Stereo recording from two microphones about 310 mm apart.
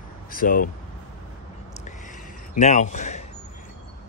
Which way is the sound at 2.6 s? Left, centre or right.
Left.